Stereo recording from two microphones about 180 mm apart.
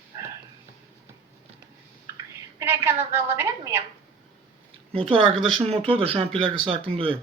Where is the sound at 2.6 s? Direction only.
15° right (ahead or behind).